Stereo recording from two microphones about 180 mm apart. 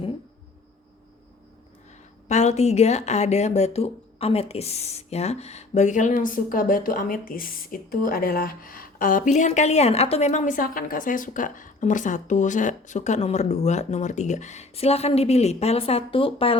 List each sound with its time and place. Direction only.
2.2 s speech: 40° left (ahead or behind)